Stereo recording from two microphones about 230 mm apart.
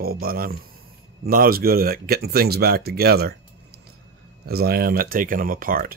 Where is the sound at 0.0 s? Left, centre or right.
Right.